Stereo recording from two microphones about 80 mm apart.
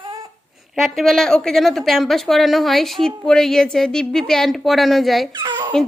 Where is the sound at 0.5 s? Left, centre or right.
Centre.